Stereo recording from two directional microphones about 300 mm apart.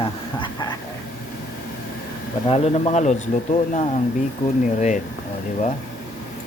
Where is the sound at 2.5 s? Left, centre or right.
Left.